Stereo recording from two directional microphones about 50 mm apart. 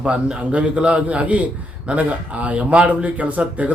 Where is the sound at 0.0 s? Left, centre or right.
Right.